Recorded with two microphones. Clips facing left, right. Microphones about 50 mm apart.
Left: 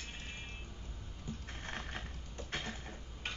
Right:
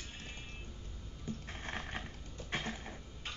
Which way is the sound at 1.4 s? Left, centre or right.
Centre.